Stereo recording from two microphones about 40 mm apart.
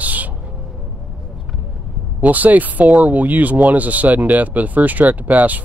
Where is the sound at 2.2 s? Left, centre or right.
Right.